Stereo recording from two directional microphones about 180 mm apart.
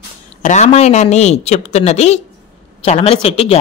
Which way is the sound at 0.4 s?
40° left (ahead or behind).